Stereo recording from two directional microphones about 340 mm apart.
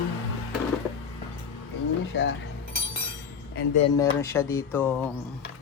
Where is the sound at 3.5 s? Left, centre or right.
Left.